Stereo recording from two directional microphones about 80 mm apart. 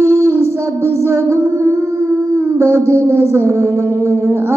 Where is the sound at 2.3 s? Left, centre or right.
Right.